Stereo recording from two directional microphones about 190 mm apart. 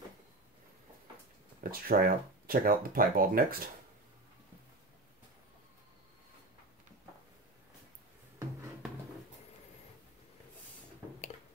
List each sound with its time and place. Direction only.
1.6 s speech: 50° right (ahead or behind)